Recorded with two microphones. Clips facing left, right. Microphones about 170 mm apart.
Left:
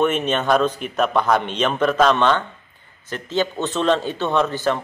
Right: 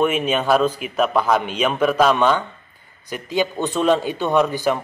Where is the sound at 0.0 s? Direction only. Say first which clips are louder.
Even; 5° right (ahead or behind).